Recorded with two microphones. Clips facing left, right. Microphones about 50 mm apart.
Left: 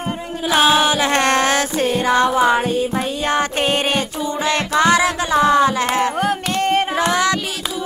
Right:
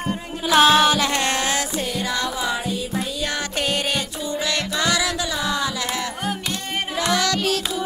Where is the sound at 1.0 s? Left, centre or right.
Left.